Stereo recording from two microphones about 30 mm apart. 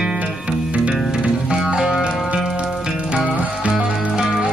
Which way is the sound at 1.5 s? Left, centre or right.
Right.